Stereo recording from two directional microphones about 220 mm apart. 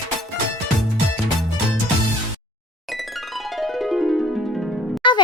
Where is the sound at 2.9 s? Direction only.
Centre (ahead or behind).